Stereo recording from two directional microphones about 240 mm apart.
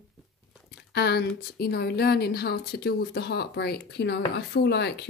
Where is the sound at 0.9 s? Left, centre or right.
Left.